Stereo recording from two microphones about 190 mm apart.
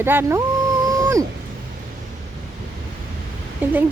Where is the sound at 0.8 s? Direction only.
15° right (ahead or behind).